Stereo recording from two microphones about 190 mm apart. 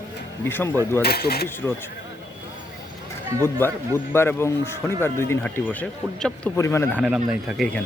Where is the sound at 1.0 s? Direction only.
55° left (ahead or behind).